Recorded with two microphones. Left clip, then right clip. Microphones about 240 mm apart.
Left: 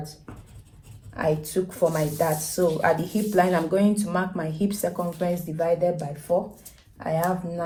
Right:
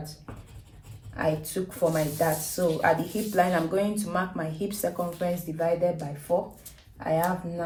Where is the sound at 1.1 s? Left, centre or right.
Left.